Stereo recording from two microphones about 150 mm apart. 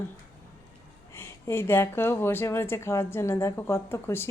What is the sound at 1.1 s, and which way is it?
Speech, 15° left (ahead or behind).